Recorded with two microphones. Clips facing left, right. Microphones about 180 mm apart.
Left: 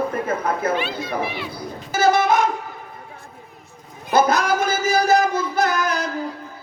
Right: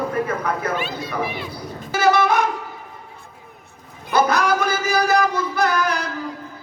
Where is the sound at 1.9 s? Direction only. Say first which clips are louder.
Even; 45° left (ahead or behind).